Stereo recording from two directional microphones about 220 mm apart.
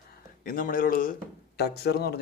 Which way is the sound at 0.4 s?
40° left (ahead or behind).